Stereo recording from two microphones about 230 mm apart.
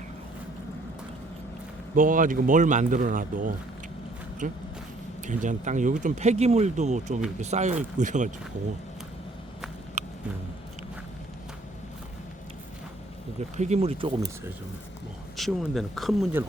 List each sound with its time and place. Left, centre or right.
2.0 s speech: right
10.0 s a sound: right
13.6 s speech: right
15.4 s speech: centre